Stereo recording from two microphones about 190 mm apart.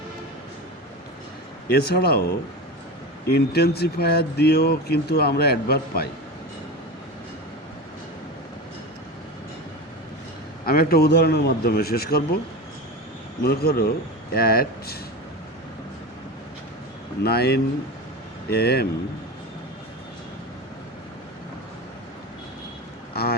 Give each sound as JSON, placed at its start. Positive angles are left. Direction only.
{"t": 1.6, "sound": "speech", "side_deg": 55}
{"t": 10.7, "sound": "speech", "side_deg": 50}
{"t": 13.4, "sound": "speech", "side_deg": 55}
{"t": 17.2, "sound": "speech", "side_deg": 55}